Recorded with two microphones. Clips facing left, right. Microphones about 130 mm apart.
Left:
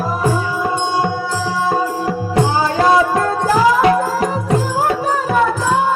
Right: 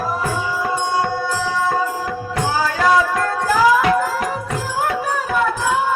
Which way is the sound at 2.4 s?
25° left (ahead or behind).